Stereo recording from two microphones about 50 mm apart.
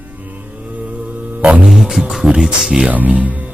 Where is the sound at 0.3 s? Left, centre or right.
Right.